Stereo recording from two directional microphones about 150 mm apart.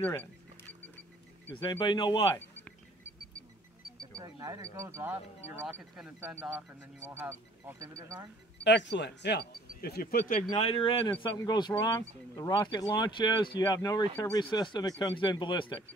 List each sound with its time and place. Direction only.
0.0 s a sound: 10° left (ahead or behind)
1.6 s speech: 30° left (ahead or behind)
4.2 s speech: 20° right (ahead or behind)
8.9 s speech: 90° left; by 10.4 s 75° left (ahead or behind)
10.5 s speech: 40° left (ahead or behind)